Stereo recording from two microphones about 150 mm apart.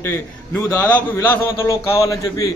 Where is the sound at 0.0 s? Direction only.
15° left (ahead or behind).